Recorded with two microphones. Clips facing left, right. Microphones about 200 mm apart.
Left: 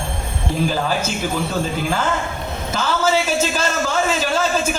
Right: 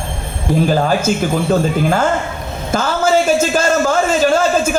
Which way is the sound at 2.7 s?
50° right (ahead or behind).